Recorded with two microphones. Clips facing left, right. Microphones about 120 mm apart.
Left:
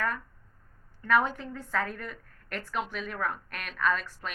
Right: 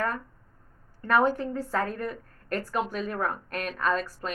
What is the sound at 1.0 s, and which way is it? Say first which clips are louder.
A woman's voice: right 3 dB; 40° right (ahead or behind).